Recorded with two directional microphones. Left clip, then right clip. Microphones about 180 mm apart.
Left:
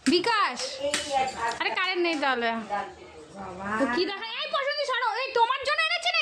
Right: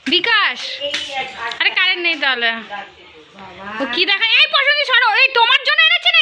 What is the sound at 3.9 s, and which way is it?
Speech, centre (ahead or behind).